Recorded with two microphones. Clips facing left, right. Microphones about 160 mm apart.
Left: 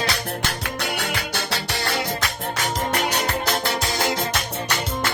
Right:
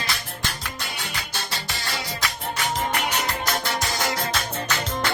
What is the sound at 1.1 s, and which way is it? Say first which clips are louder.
Music: left 5 dB; 70° left (ahead or behind).